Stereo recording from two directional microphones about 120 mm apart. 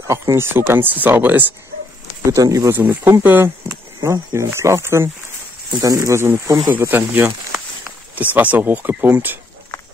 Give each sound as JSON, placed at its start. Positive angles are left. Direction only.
{"t": 0.0, "sound": "speech", "side_deg": -25}
{"t": 2.3, "sound": "speech", "side_deg": -25}
{"t": 2.8, "sound": "speech", "side_deg": -15}